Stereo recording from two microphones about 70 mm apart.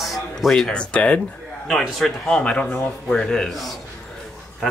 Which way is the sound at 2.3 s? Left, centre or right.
Centre.